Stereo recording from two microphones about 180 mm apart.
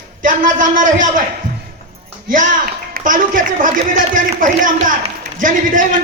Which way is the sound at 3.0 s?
45° right (ahead or behind).